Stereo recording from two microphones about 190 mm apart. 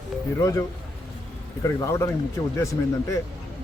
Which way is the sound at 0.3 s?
15° left (ahead or behind).